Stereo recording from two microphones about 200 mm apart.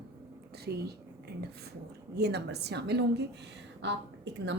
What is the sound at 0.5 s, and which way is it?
A woman's voice, 50° right (ahead or behind).